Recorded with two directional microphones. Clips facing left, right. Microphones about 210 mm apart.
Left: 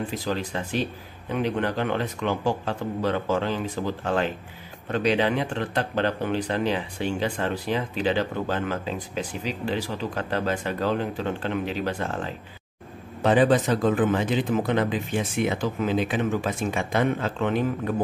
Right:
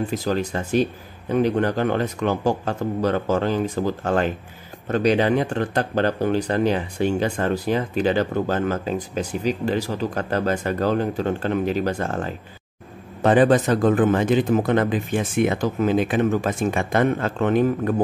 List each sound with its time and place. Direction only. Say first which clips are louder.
0.2 s speech: right 5 dB; 45° right (ahead or behind)